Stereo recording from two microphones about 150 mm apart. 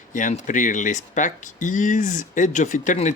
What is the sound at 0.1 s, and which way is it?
Speech, 60° left (ahead or behind).